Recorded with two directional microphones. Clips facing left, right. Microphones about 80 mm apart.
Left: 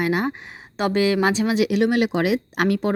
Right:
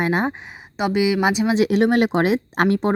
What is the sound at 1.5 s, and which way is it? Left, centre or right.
Speech, right.